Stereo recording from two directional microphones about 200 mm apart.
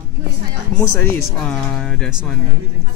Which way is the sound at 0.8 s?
10° left (ahead or behind).